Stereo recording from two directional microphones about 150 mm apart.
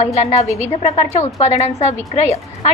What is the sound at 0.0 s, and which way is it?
A woman's voice, 45° left (ahead or behind).